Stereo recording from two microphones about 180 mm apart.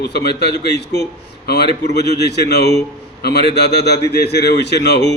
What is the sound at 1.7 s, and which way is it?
Speech, 40° right (ahead or behind).